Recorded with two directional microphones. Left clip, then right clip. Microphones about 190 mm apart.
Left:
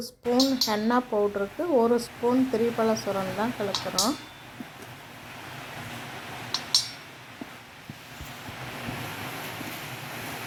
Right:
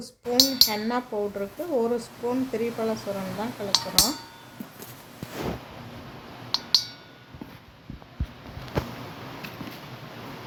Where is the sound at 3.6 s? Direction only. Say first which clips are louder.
Left 3 dB; 15° left (ahead or behind).